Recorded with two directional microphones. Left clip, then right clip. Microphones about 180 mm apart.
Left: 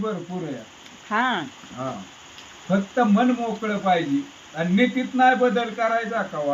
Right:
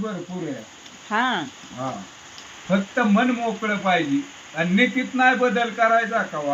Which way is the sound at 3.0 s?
10° left (ahead or behind).